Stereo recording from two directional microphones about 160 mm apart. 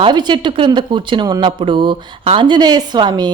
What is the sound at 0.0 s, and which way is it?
Speech, 25° right (ahead or behind).